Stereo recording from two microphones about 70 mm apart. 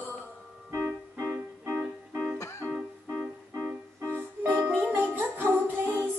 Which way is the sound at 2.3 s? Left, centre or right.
Left.